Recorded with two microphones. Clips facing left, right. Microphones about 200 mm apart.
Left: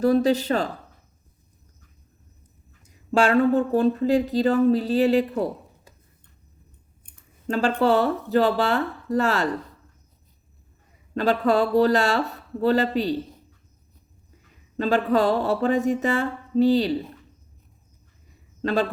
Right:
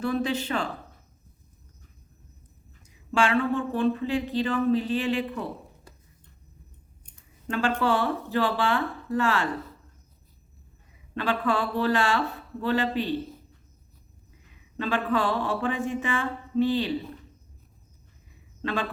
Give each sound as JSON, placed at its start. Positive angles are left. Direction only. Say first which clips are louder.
{"t": 0.0, "sound": "speech", "louder": "left 8 dB", "side_deg": 40}
{"t": 3.1, "sound": "speech", "louder": "left 6 dB", "side_deg": 40}
{"t": 7.4, "sound": "speech", "louder": "left 5 dB", "side_deg": 40}
{"t": 11.1, "sound": "speech", "louder": "left 6 dB", "side_deg": 40}
{"t": 14.8, "sound": "speech", "louder": "left 6 dB", "side_deg": 40}
{"t": 18.6, "sound": "a man's voice", "louder": "left 7 dB", "side_deg": 40}